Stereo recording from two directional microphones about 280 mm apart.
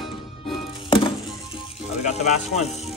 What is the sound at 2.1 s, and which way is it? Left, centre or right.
Speech, left.